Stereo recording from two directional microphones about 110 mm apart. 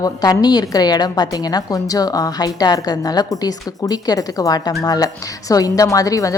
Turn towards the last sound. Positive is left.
turn(degrees=30)  # may be behind; listen again after turning